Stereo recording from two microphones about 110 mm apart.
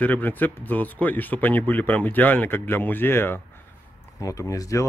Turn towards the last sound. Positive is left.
turn(degrees=30)  # may be behind; listen again after turning